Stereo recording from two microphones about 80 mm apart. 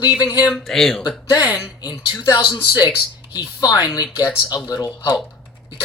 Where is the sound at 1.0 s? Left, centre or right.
Left.